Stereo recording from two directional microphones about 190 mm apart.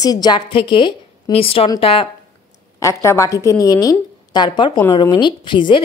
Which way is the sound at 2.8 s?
15° left (ahead or behind).